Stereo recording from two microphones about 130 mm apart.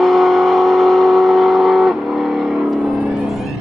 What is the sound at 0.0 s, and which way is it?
Vehicle, centre (ahead or behind).